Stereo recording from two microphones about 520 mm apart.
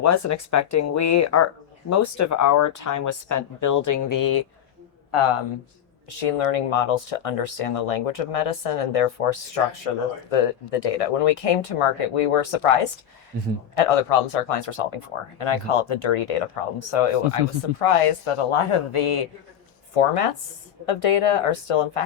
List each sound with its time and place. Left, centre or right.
0.0 s speech: left
5.1 s speech: left
6.1 s speech: left
19.9 s speech: left